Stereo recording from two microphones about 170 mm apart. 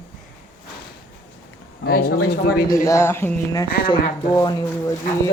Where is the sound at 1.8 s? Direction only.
65° left (ahead or behind).